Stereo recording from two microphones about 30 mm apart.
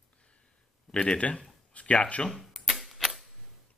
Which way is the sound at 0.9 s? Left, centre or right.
Left.